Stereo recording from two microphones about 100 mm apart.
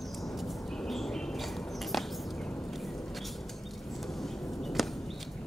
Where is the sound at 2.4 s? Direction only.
20° left (ahead or behind).